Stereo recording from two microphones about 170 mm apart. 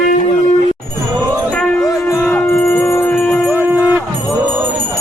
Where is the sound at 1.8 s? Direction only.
15° left (ahead or behind).